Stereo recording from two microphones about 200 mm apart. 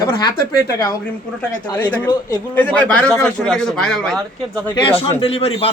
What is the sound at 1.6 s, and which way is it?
A man's voice, 20° left (ahead or behind).